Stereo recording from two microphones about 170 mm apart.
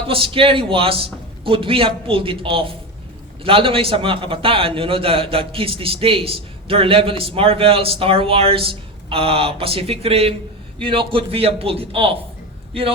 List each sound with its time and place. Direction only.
0.1 s a man's voice: 30° right (ahead or behind)